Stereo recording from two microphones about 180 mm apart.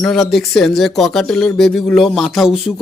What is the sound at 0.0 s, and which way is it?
A man's voice, centre (ahead or behind).